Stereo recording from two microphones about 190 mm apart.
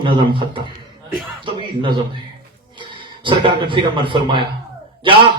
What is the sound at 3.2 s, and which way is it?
A man's voice, 25° right (ahead or behind).